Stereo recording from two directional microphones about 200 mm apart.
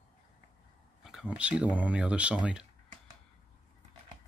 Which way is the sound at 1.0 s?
5° right (ahead or behind).